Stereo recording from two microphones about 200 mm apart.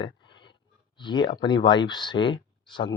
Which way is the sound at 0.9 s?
20° left (ahead or behind).